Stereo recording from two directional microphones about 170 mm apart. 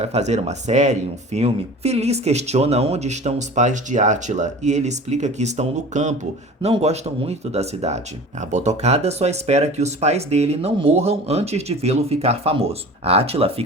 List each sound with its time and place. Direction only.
0.0 s speech: 40° right (ahead or behind)